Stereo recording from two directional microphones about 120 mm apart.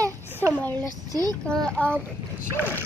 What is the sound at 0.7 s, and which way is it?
Speech, 30° right (ahead or behind).